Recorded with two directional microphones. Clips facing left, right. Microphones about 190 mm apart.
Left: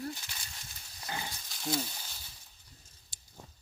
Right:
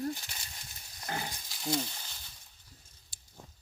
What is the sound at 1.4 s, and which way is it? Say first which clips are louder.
Frying: even; centre (ahead or behind).